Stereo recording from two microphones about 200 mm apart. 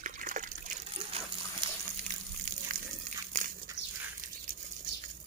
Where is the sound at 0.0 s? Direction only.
40° right (ahead or behind).